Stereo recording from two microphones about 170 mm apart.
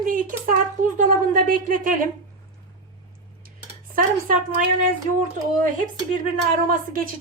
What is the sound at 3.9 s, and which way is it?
Speech, 55° right (ahead or behind).